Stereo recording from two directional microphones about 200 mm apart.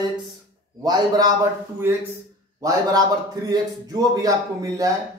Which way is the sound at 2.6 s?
15° right (ahead or behind).